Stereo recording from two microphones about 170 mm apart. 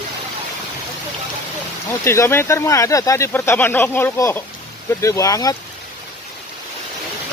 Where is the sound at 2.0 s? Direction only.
15° left (ahead or behind).